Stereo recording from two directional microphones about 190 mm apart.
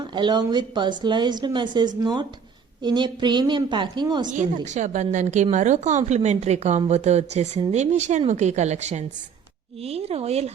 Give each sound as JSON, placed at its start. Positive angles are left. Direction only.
{"t": 0.0, "sound": "a woman's voice", "side_deg": -25}
{"t": 4.6, "sound": "speech", "side_deg": -40}